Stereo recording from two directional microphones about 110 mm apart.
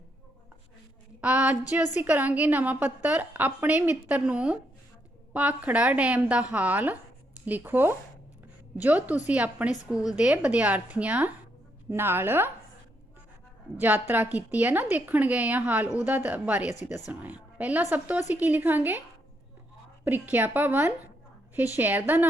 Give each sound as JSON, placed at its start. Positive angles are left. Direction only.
{"t": 1.2, "sound": "a sound", "side_deg": -10}
{"t": 1.7, "sound": "a woman's voice", "side_deg": -15}
{"t": 13.7, "sound": "a woman's voice", "side_deg": -15}
{"t": 20.1, "sound": "a woman's voice", "side_deg": -15}